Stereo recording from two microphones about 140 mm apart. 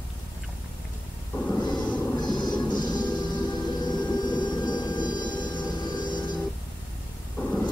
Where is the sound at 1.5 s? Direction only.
30° left (ahead or behind).